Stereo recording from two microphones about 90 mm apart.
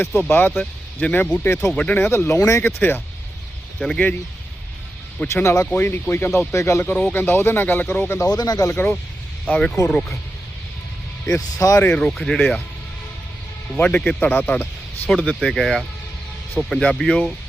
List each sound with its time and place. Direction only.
0.3 s speech: 25° left (ahead or behind)
2.0 s speech: 30° left (ahead or behind)
3.8 s speech: 5° left (ahead or behind)
5.3 s speech: 30° left (ahead or behind)
8.2 s speech: 45° left (ahead or behind)
8.7 s speech: 20° left (ahead or behind)
9.5 s speech: 10° left (ahead or behind)
11.3 s speech: 40° left (ahead or behind)
11.9 s speech: 10° left (ahead or behind)
13.7 s speech: 15° left (ahead or behind)